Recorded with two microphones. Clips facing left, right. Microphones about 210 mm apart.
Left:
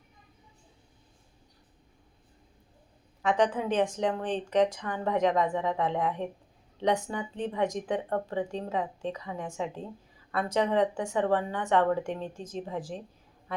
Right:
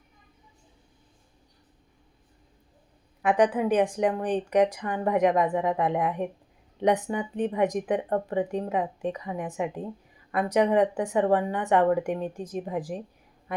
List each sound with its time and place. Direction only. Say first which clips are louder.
3.2 s a woman's voice: right 4 dB; 15° right (ahead or behind)